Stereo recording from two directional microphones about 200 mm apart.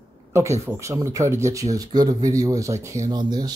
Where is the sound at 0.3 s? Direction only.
15° right (ahead or behind).